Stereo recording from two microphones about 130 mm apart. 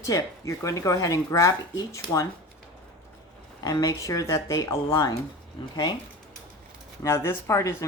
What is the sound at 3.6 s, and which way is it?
Speech, 30° left (ahead or behind).